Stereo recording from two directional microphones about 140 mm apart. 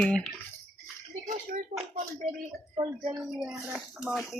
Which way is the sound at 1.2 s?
60° right (ahead or behind).